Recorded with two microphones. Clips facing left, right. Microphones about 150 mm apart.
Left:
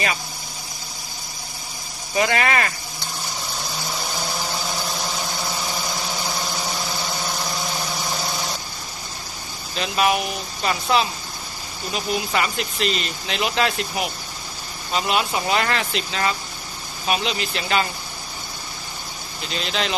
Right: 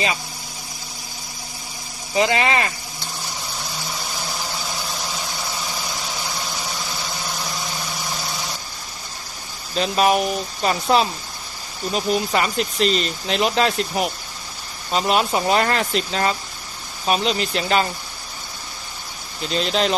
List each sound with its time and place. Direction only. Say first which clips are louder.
2.1 s speech: right 1 dB; 25° right (ahead or behind)
9.8 s speech: right 3 dB; 35° right (ahead or behind)
19.5 s speech: right 5 dB; 40° right (ahead or behind)